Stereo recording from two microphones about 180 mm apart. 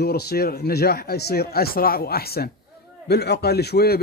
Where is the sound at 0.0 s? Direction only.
60° left (ahead or behind).